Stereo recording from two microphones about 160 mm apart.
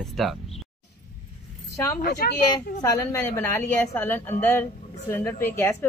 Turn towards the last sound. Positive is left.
turn(degrees=15)  # may be behind; listen again after turning